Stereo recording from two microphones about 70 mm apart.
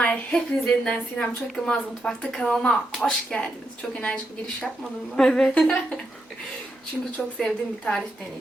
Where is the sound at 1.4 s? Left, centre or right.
Centre.